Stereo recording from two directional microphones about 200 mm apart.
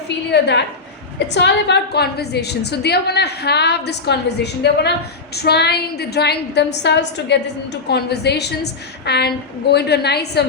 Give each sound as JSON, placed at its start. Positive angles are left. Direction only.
{"t": 0.3, "sound": "a woman's voice", "side_deg": 60}